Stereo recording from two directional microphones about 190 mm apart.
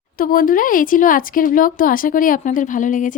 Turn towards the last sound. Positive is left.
turn(degrees=45)  # may be behind; listen again after turning